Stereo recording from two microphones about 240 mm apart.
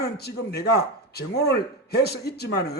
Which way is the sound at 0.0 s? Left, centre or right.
Left.